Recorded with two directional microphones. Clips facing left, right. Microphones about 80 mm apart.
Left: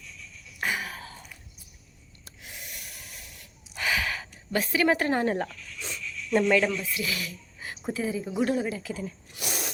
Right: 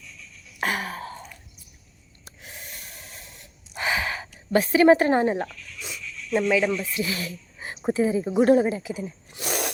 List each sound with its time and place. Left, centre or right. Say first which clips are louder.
0.6 s gasp: right 4 dB; right
2.4 s gasp: right 2 dB; right
4.5 s a woman's voice: right 8 dB; right
5.3 s a sound: right 2 dB; centre
6.7 s speech: right 4 dB; right
8.8 s speech: right 3 dB; centre
9.4 s a sound: right 6 dB; right